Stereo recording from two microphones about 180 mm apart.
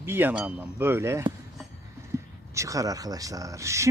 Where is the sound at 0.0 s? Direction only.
10° right (ahead or behind).